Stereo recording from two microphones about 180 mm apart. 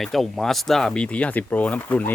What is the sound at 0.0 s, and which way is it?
Speech, centre (ahead or behind).